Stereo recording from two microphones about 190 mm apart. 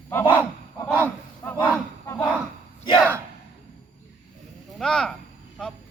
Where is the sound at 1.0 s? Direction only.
10° left (ahead or behind).